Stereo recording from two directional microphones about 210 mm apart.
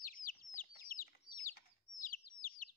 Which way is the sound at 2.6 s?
40° left (ahead or behind).